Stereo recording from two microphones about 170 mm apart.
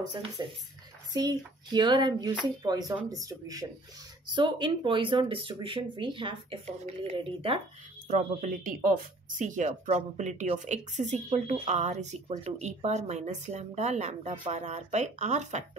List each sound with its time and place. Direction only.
0.4 s speech: 20° right (ahead or behind)
8.1 s speech: 50° right (ahead or behind)